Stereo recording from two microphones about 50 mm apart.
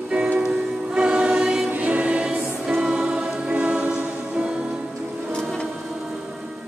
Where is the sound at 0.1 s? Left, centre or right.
Right.